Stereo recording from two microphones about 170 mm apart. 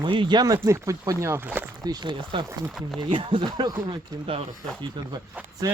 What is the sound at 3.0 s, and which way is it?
Speech, 30° right (ahead or behind).